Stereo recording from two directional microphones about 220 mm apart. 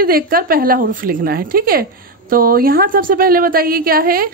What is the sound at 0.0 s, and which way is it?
A woman's voice, 40° right (ahead or behind).